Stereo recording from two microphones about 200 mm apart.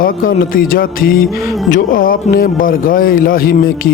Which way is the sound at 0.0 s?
45° left (ahead or behind).